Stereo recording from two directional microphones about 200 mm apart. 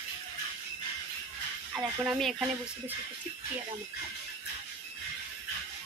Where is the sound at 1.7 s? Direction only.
Centre (ahead or behind).